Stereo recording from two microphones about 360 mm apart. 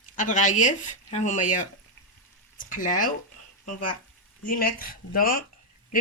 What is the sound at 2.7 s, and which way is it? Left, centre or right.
Speech, left.